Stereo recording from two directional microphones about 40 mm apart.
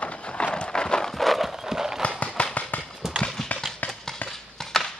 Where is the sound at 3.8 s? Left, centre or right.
Left.